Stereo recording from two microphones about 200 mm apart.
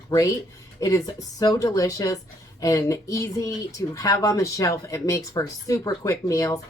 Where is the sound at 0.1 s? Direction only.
20° left (ahead or behind).